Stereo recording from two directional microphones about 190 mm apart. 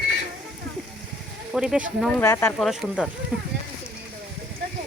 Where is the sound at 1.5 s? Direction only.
5° right (ahead or behind).